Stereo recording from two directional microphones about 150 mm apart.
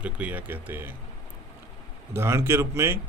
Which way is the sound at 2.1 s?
15° right (ahead or behind).